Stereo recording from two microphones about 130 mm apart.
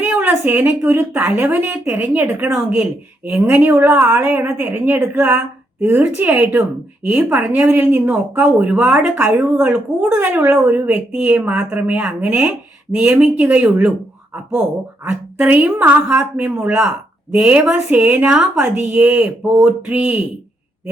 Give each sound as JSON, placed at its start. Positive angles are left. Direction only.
{"t": 0.0, "sound": "a woman's voice", "side_deg": -15}
{"t": 15.0, "sound": "a woman's voice", "side_deg": -15}